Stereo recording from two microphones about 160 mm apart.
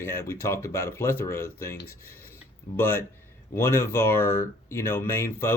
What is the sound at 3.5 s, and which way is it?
Speech, 15° left (ahead or behind).